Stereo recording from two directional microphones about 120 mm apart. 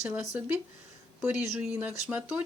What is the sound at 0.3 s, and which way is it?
Speech, 10° right (ahead or behind).